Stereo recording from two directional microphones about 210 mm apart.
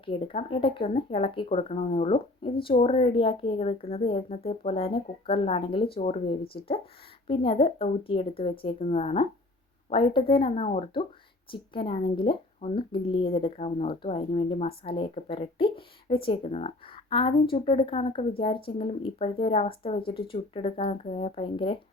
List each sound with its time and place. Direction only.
0.0 s speech: 25° left (ahead or behind)